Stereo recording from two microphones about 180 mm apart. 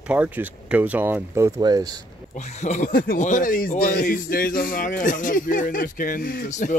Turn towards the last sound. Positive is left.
turn(degrees=45)  # may be behind; listen again after turning